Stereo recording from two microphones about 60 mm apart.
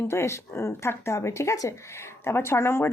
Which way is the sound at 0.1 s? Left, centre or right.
Left.